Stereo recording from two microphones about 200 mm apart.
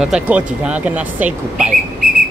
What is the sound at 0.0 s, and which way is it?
Speech, 5° right (ahead or behind).